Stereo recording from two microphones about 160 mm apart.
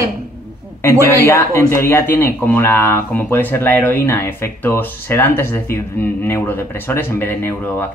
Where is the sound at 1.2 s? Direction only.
15° left (ahead or behind).